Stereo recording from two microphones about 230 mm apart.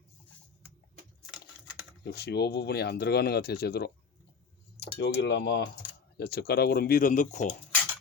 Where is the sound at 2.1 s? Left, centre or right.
Left.